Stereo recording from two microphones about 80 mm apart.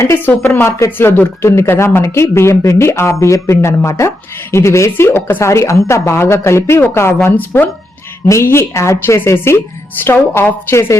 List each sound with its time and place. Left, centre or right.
0.2 s speech: left
8.3 s speech: left